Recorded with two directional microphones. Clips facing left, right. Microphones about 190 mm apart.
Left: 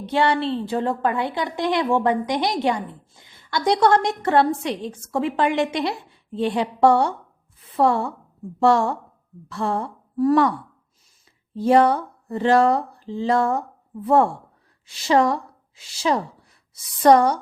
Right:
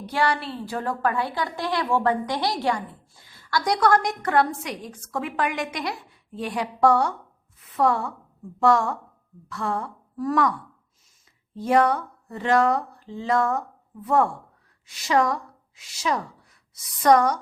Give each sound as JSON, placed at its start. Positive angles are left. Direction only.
{"t": 0.0, "sound": "a woman's voice", "side_deg": 25}
{"t": 11.5, "sound": "a woman's voice", "side_deg": 30}